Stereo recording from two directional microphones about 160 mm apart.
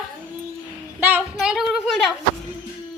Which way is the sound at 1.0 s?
10° right (ahead or behind).